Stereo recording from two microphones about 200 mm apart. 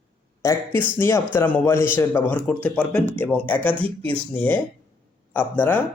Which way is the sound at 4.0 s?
30° right (ahead or behind).